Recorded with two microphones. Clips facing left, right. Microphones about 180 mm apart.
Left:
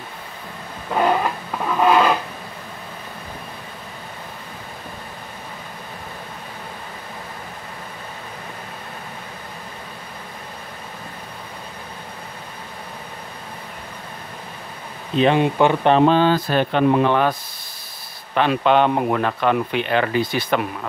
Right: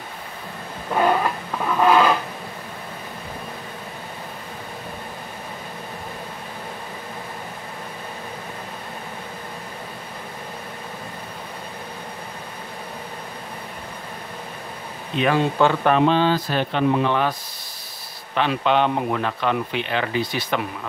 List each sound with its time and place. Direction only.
0.9 s a sound: 5° left (ahead or behind)
15.3 s speech: 15° left (ahead or behind)
16.1 s speech: 50° left (ahead or behind)